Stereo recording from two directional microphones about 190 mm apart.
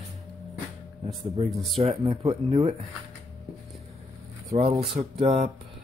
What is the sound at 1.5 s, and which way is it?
Speech, centre (ahead or behind).